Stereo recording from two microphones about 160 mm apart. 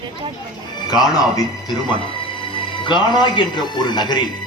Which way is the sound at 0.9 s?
25° left (ahead or behind).